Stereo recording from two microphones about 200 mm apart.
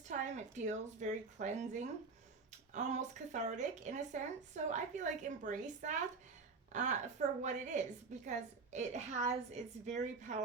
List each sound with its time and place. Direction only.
0.0 s speech: 35° right (ahead or behind)